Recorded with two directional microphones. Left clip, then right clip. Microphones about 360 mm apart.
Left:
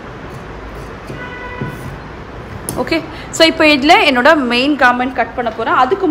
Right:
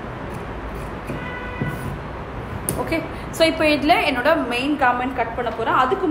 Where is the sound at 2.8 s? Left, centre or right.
Left.